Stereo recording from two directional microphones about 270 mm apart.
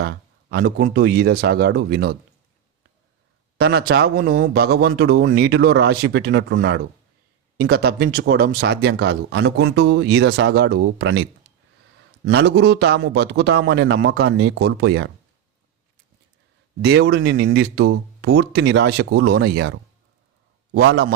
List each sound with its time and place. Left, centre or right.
0.0 s speech: right
3.6 s speech: right
16.8 s speech: right